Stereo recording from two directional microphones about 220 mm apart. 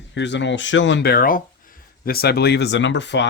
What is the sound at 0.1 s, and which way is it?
Speech, 55° left (ahead or behind).